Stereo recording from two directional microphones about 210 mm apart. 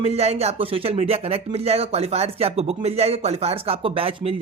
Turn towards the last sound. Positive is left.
turn(degrees=-25)  # may be behind; listen again after turning